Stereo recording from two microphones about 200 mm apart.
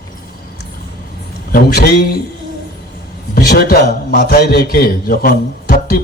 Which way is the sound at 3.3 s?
50° left (ahead or behind).